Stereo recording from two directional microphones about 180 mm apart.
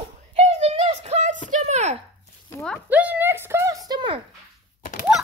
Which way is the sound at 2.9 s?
10° right (ahead or behind).